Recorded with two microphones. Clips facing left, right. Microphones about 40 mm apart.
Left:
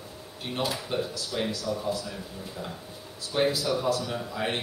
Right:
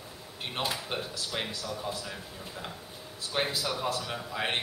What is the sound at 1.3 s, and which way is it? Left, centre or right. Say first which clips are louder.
Speech: left 6 dB; right.